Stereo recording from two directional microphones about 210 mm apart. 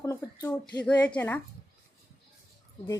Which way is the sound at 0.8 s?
5° left (ahead or behind).